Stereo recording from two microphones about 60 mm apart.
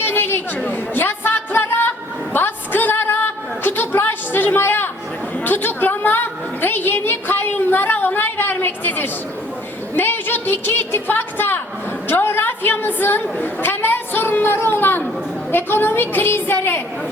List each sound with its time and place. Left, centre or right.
0.1 s chatter: left
0.7 s a sound: left
15.5 s a woman's voice: left